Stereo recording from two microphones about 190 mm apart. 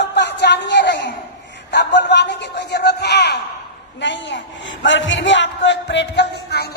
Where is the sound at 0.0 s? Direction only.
65° left (ahead or behind).